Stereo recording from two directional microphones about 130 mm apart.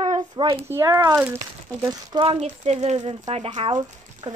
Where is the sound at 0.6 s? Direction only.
20° right (ahead or behind).